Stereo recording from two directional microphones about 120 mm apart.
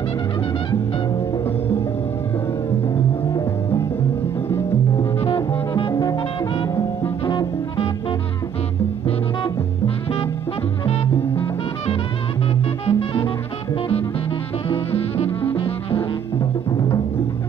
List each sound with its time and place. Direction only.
5.3 s music: 45° left (ahead or behind)
7.2 s music: 45° left (ahead or behind)
12.8 s music: 50° left (ahead or behind)
15.5 s music: 50° left (ahead or behind)